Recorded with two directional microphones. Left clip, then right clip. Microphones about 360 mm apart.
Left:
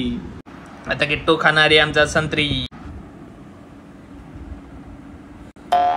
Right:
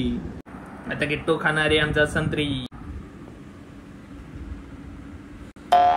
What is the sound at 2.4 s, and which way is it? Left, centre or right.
Speech, left.